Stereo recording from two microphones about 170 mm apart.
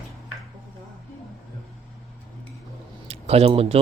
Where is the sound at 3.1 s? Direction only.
35° right (ahead or behind).